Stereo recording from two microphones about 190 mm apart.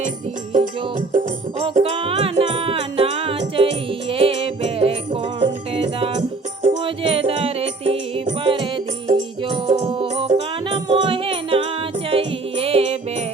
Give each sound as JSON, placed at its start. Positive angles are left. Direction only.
{"t": 0.5, "sound": "music", "side_deg": -40}
{"t": 1.6, "sound": "music", "side_deg": -30}